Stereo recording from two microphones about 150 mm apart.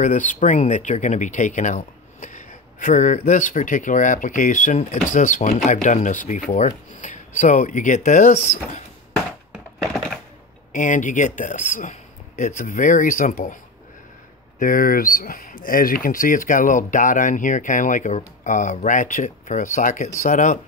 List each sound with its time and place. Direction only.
0.0 s speech: 55° left (ahead or behind)
9.5 s a sound: centre (ahead or behind)
10.7 s speech: 60° left (ahead or behind)
14.6 s speech: 65° left (ahead or behind)